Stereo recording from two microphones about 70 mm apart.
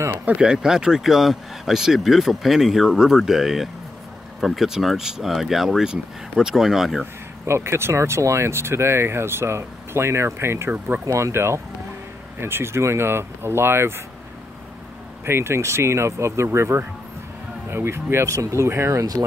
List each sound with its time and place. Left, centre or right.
0.2 s speech: centre
7.4 s speech: right
15.2 s speech: right